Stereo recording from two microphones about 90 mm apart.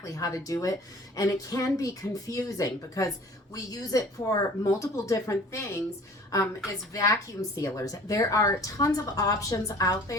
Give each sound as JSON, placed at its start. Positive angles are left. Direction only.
{"t": 0.0, "sound": "speech", "side_deg": 40}
{"t": 6.9, "sound": "speech", "side_deg": 40}